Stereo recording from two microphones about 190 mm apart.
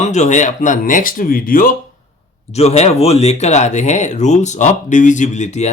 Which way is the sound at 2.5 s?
35° left (ahead or behind).